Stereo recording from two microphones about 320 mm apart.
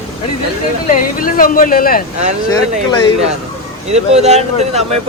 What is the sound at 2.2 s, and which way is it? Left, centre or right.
Speech, right.